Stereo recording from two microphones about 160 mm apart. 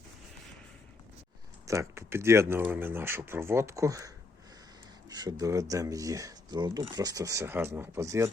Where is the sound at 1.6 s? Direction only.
20° right (ahead or behind).